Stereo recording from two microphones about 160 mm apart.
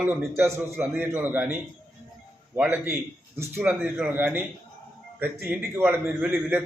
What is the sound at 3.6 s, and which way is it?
A man's voice, 5° right (ahead or behind).